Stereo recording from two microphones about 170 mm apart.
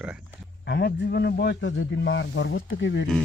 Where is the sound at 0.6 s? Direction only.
75° left (ahead or behind).